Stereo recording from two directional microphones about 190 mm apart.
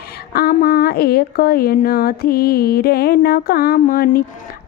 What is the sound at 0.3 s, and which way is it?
A woman's voice, 55° left (ahead or behind).